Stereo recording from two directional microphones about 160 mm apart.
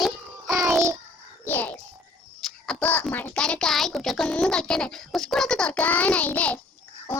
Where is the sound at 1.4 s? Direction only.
10° left (ahead or behind).